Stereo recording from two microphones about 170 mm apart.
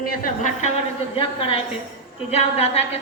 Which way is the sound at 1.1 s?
35° left (ahead or behind).